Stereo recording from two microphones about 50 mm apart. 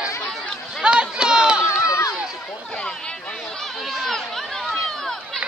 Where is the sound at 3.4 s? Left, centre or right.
Centre.